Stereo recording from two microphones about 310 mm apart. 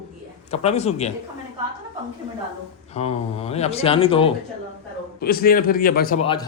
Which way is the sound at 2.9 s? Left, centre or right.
Centre.